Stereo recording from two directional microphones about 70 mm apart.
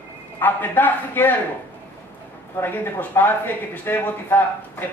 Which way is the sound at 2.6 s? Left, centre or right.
Left.